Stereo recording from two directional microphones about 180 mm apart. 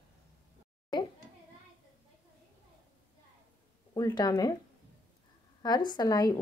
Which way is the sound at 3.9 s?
20° left (ahead or behind).